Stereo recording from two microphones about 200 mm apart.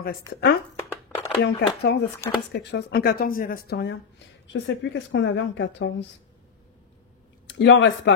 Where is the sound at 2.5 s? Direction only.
55° left (ahead or behind).